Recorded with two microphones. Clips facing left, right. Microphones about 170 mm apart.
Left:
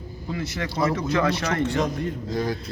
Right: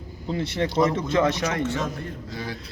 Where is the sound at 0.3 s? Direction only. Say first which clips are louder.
Right 4 dB; 30° right (ahead or behind).